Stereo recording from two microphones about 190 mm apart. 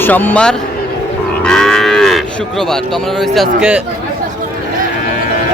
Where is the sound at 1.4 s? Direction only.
5° left (ahead or behind).